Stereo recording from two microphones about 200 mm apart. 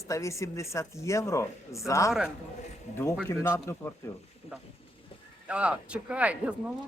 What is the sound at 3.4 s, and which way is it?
Speech, 15° left (ahead or behind).